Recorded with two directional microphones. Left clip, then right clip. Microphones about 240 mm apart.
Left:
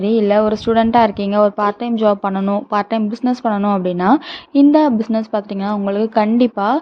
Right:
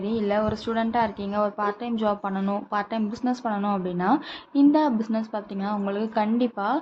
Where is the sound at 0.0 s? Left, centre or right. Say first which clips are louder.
Left 11 dB; left.